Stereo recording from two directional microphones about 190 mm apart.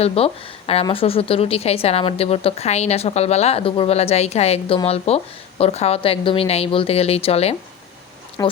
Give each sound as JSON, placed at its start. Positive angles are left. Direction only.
{"t": 0.0, "sound": "a woman's voice", "side_deg": 30}
{"t": 8.4, "sound": "speech", "side_deg": 15}